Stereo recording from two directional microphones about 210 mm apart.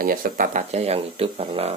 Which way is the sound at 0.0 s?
40° right (ahead or behind).